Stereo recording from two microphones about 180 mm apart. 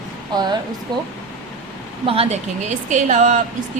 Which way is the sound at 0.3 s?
25° right (ahead or behind).